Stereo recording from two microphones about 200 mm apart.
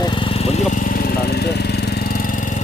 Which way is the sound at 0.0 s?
25° left (ahead or behind).